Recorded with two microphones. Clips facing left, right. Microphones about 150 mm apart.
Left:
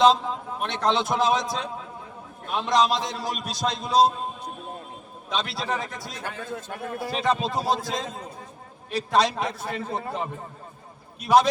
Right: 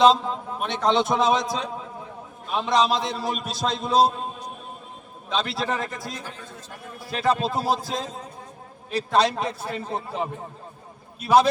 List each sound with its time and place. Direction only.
0.0 s a man's voice: centre (ahead or behind)
5.3 s a man's voice: centre (ahead or behind)
6.2 s a man's voice: 65° left (ahead or behind)
7.2 s a man's voice: centre (ahead or behind)
11.2 s a man's voice: centre (ahead or behind)